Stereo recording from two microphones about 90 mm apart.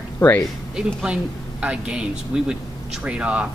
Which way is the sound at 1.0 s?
15° right (ahead or behind).